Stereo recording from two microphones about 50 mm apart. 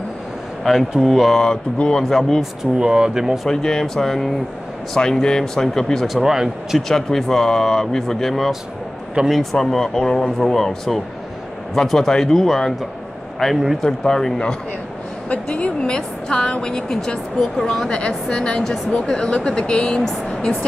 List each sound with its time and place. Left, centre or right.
0.7 s speech: centre
1.4 s speech: centre
2.6 s speech: centre
3.4 s speech: centre
6.0 s speech: centre
6.9 s speech: centre
13.8 s speech: centre
15.2 s a woman's voice: left; by 17.8 s centre
17.8 s a woman's voice: centre